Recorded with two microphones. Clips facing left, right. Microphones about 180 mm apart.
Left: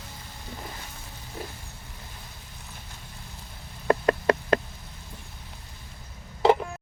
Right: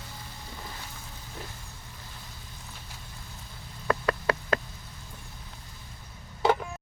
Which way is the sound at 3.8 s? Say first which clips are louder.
Left 5 dB; 40° left (ahead or behind).